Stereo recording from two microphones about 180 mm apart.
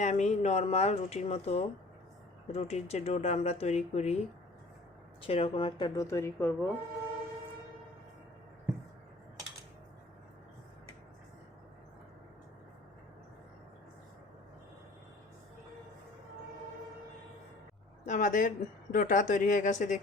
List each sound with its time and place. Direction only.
0.0 s speech: 40° left (ahead or behind)
5.2 s speech: 30° left (ahead or behind); by 6.7 s 15° left (ahead or behind)
18.0 s a woman's voice: 45° left (ahead or behind)